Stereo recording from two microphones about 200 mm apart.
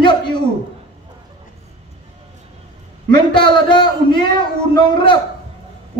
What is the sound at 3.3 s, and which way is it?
Speech, 25° left (ahead or behind).